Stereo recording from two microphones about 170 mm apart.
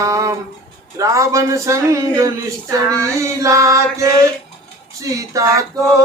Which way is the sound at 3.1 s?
20° right (ahead or behind).